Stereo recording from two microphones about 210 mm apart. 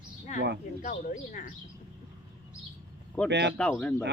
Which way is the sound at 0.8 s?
35° left (ahead or behind).